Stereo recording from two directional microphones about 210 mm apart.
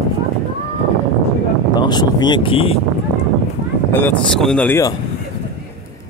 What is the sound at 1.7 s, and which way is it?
Speech, 20° left (ahead or behind).